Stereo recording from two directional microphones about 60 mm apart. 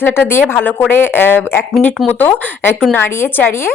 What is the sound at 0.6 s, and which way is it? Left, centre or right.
A woman's voice, left.